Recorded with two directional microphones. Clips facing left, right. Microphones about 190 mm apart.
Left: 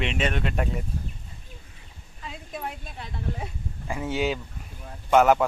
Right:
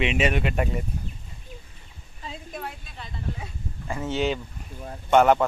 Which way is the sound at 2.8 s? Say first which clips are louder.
Left 2 dB; 60° left (ahead or behind).